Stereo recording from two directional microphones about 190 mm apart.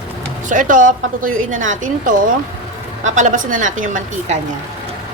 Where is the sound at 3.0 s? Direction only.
40° right (ahead or behind).